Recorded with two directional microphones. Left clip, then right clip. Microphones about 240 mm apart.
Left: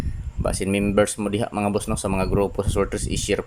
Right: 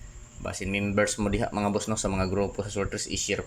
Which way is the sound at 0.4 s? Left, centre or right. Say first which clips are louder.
Left 7 dB; left.